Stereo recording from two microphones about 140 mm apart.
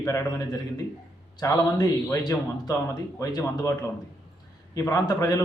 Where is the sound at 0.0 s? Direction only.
25° left (ahead or behind).